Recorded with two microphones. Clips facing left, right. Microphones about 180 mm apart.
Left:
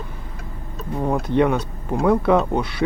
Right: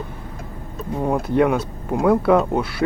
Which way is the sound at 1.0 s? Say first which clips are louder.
Right 1 dB; 5° right (ahead or behind).